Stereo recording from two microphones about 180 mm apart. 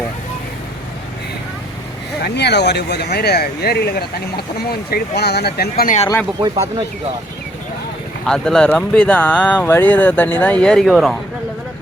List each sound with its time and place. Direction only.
2.2 s speech: 70° left (ahead or behind)
6.4 s speech: 30° right (ahead or behind)
8.2 s speech: 5° left (ahead or behind)